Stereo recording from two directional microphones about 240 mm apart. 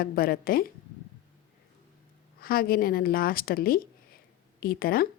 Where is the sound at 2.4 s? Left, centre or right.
Left.